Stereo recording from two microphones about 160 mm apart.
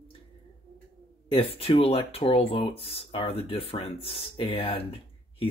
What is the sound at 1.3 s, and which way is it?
Speech, 35° left (ahead or behind).